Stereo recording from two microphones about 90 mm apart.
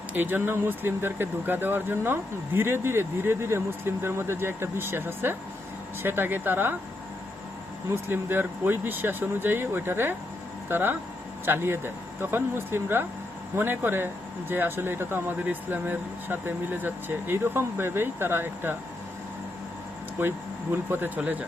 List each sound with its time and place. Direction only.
0.1 s speech: 20° right (ahead or behind)
7.9 s speech: 25° right (ahead or behind)
20.9 s speech: 20° right (ahead or behind)